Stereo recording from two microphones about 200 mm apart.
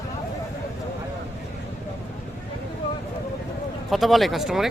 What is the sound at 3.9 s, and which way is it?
Speech, centre (ahead or behind).